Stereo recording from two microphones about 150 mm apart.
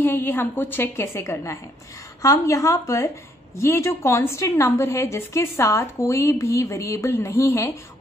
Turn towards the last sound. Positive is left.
turn(degrees=15)  # may be behind; listen again after turning